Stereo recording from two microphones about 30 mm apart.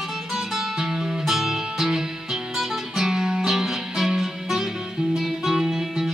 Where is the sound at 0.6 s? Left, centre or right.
Centre.